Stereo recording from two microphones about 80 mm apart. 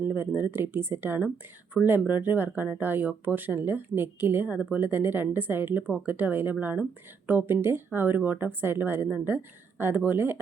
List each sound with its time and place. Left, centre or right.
0.1 s speech: right